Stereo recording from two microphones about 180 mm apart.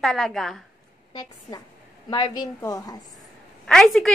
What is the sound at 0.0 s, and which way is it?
Speech, centre (ahead or behind).